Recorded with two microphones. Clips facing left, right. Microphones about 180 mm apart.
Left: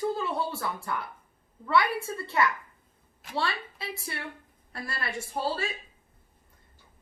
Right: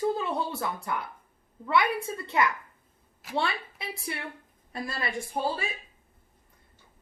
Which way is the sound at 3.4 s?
15° right (ahead or behind).